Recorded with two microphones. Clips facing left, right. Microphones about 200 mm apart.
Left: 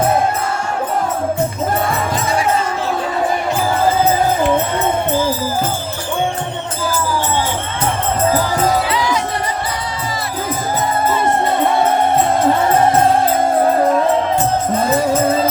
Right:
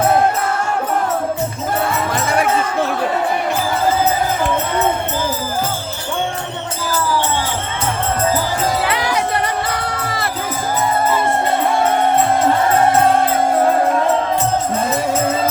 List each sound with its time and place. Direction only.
8.9 s music: 60° right (ahead or behind)